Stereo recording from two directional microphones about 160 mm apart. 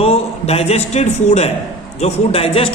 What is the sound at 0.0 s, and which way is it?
A woman's voice, 40° left (ahead or behind).